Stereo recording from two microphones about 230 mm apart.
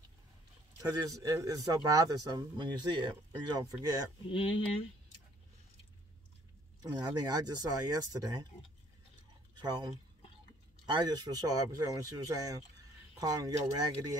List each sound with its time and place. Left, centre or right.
0.7 s speech: centre
4.3 s speech: left
6.8 s speech: centre
9.6 s speech: centre